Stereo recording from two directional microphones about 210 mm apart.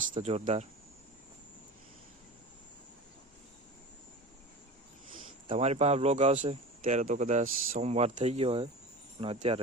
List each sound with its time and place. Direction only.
0.1 s speech: 30° right (ahead or behind)
5.5 s speech: 30° right (ahead or behind)